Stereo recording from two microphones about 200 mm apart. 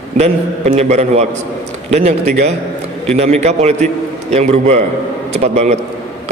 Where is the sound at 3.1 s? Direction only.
35° right (ahead or behind).